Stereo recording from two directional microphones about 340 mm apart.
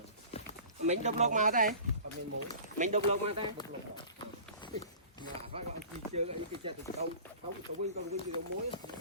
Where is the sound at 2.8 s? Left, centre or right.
Centre.